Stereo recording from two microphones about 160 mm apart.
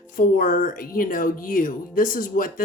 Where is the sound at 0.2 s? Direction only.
60° left (ahead or behind).